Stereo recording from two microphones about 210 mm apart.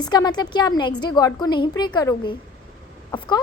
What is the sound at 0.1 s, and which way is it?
A woman's voice, 20° left (ahead or behind).